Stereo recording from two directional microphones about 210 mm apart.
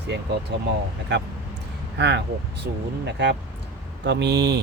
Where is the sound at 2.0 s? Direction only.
55° right (ahead or behind).